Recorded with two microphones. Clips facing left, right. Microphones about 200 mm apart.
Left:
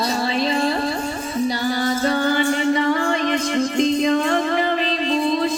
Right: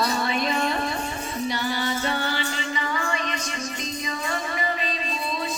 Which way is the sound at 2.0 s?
45° left (ahead or behind).